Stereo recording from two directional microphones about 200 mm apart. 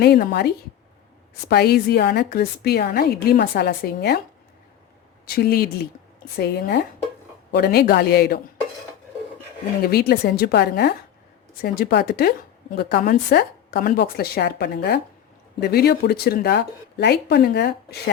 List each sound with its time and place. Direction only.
0.0 s a woman's voice: 50° left (ahead or behind)
5.2 s a woman's voice: 50° left (ahead or behind)
9.8 s a woman's voice: 50° left (ahead or behind)